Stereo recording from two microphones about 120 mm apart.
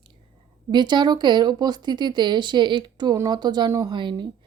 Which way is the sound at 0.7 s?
40° right (ahead or behind).